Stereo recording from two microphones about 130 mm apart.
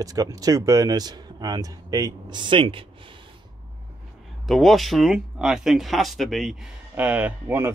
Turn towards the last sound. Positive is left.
turn(degrees=-15)  # may be behind; listen again after turning